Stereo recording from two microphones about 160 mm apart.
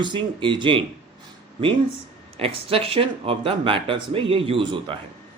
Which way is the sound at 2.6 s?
35° right (ahead or behind).